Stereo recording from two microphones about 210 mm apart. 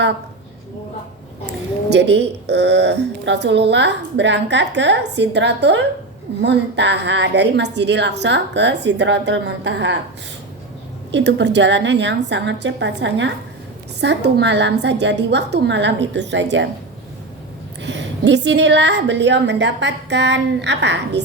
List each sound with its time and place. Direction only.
1.9 s a woman's voice: 55° right (ahead or behind)
11.1 s a woman's voice: 55° right (ahead or behind)
17.8 s a woman's voice: 55° right (ahead or behind)